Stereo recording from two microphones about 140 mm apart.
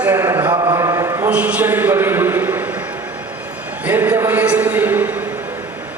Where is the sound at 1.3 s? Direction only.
10° right (ahead or behind).